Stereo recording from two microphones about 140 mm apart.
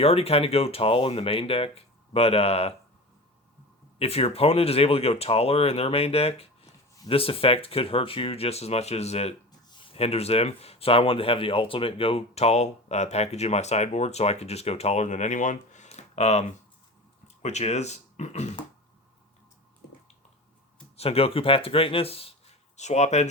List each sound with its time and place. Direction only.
0.0 s speech: 45° left (ahead or behind)
3.9 s speech: 45° left (ahead or behind)
20.9 s speech: 45° left (ahead or behind)